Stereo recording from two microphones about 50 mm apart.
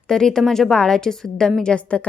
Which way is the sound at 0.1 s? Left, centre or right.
Centre.